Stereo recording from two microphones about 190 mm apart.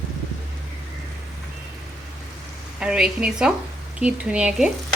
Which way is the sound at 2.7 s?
5° right (ahead or behind).